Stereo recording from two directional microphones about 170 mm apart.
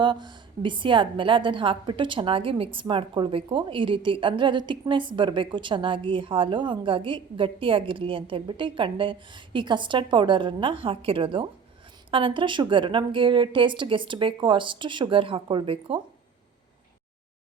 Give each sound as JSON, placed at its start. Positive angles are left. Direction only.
{"t": 0.0, "sound": "a woman's voice", "side_deg": -25}